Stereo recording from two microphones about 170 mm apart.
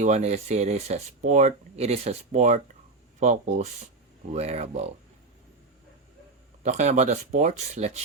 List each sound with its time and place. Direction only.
0.0 s speech: 40° right (ahead or behind)
6.6 s speech: 45° right (ahead or behind)